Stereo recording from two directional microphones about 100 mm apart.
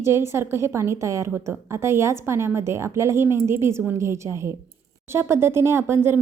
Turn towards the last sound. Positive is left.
turn(degrees=-25)  # may be behind; listen again after turning